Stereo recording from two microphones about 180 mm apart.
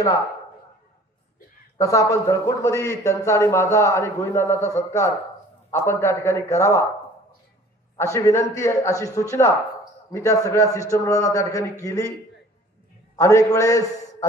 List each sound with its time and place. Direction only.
1.8 s a man's voice: 15° left (ahead or behind)
5.7 s a man's voice: 15° left (ahead or behind)
8.0 s a man's voice: 15° left (ahead or behind)
13.1 s a man's voice: 15° left (ahead or behind)